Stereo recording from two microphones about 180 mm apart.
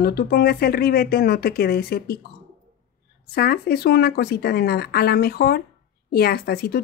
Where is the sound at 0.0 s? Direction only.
60° left (ahead or behind).